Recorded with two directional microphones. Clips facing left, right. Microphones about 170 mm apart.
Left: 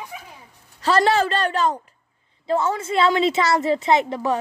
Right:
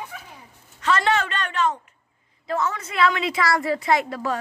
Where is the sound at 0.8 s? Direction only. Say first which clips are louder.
Left 4 dB; 35° left (ahead or behind); by 4.4 s 20° left (ahead or behind).